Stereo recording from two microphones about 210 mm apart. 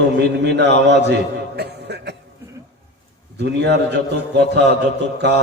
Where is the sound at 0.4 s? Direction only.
55° right (ahead or behind).